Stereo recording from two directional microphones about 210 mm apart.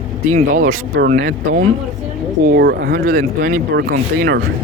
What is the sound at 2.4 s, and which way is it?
Speech, 50° right (ahead or behind).